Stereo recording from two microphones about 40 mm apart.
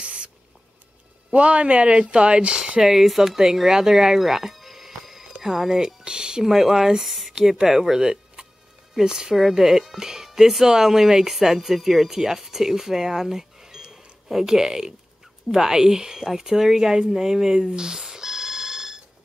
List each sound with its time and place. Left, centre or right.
0.0 s spray: right
1.3 s speech: right
2.8 s speech: centre
6.0 s speech: right